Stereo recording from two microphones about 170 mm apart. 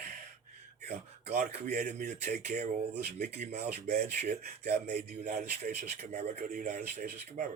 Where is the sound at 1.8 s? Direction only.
45° right (ahead or behind).